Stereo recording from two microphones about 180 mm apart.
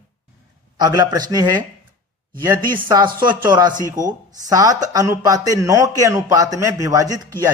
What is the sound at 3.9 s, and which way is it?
Speech, 20° right (ahead or behind).